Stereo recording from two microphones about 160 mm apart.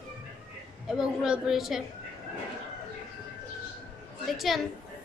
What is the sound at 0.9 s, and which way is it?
Speech, 5° right (ahead or behind).